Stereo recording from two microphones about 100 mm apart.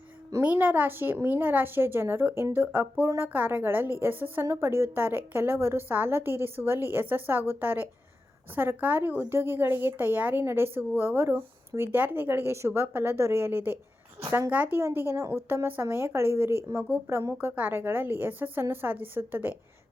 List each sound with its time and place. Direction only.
0.4 s a woman's voice: 20° right (ahead or behind)